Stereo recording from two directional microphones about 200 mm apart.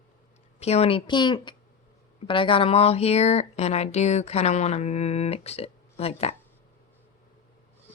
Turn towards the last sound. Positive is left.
turn(degrees=30)  # may be behind; listen again after turning